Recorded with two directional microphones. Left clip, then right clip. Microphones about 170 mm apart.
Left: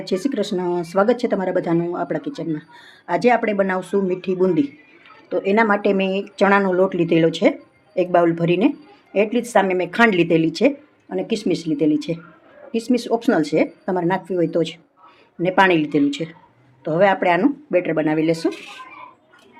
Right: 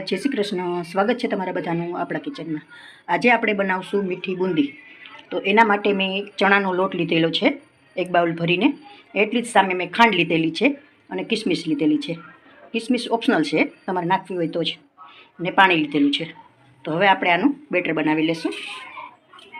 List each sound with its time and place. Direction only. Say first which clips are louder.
0.0 s speech: left 1 dB; 30° left (ahead or behind); by 17.5 s 45° left (ahead or behind)
17.7 s speech: left 3 dB; 30° left (ahead or behind); by 18.5 s 45° left (ahead or behind)